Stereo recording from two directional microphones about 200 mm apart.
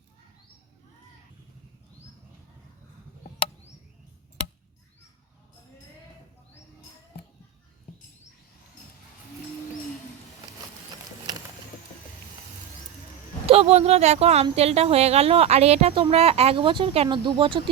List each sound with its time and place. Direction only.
13.5 s speech: 30° right (ahead or behind)